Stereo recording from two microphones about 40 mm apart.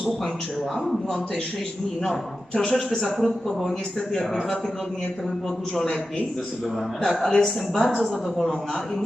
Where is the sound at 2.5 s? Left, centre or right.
Left.